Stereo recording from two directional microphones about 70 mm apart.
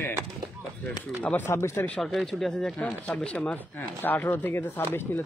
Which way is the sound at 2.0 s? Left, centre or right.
Centre.